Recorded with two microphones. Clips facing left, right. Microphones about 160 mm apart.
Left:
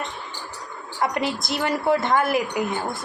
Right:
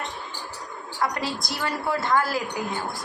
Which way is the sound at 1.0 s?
20° left (ahead or behind).